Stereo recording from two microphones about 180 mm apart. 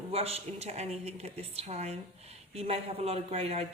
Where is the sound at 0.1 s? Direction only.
35° right (ahead or behind).